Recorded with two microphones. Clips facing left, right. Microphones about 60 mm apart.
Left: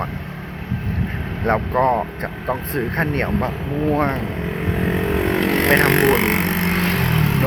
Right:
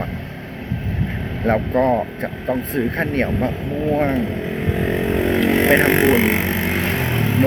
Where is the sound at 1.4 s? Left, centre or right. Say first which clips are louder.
Even; centre.